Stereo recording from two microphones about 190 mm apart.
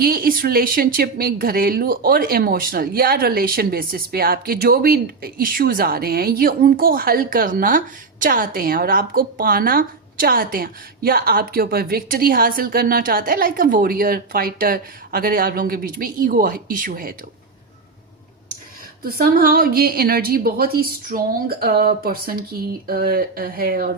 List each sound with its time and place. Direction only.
0.0 s a woman's voice: 50° right (ahead or behind)
19.0 s a woman's voice: 50° right (ahead or behind)